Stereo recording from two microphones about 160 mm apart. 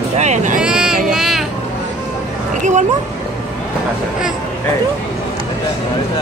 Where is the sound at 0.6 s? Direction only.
5° right (ahead or behind).